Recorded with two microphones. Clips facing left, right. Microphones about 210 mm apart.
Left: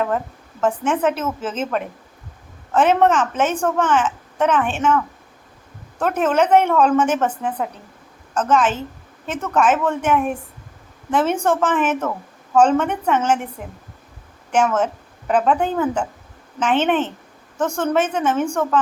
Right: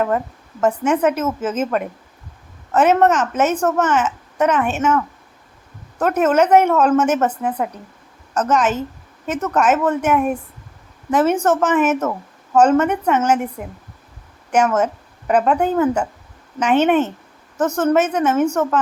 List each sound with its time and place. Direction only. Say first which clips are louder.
0.6 s a woman's voice: right 2 dB; 10° right (ahead or behind)